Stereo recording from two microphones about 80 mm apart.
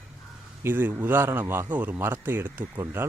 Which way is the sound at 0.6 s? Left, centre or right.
Right.